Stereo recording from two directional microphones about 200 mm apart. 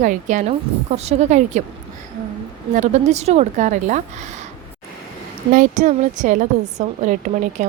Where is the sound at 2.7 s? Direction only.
35° right (ahead or behind).